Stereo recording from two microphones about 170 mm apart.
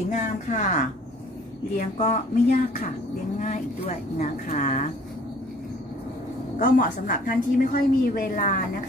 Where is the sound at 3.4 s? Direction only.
45° left (ahead or behind).